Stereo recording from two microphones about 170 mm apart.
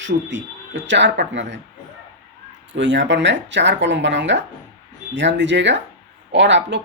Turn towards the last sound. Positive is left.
turn(degrees=-90)